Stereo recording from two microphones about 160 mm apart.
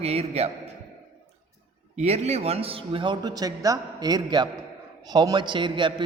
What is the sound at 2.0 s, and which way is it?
A man's voice, 45° right (ahead or behind).